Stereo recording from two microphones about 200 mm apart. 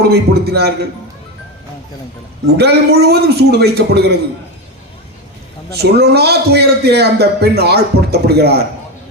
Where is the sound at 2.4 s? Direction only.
55° right (ahead or behind).